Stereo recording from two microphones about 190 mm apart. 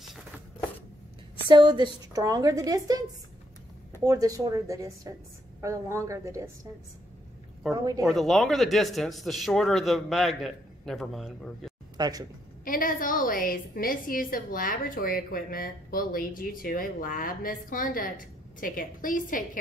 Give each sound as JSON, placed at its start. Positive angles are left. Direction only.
{"t": 1.5, "sound": "a woman's voice", "side_deg": -25}
{"t": 4.0, "sound": "speech", "side_deg": -20}
{"t": 7.7, "sound": "a woman's voice", "side_deg": -20}
{"t": 8.0, "sound": "speech", "side_deg": 0}
{"t": 12.0, "sound": "a woman's voice", "side_deg": -20}
{"t": 12.6, "sound": "a woman's voice", "side_deg": 45}